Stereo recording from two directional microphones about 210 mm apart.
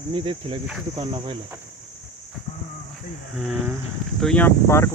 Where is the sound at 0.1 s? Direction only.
25° right (ahead or behind).